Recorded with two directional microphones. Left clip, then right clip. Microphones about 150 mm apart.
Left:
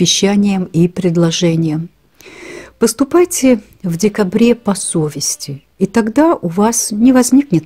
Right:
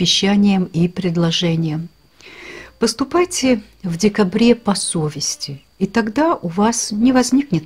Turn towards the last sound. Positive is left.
turn(degrees=50)  # may be behind; listen again after turning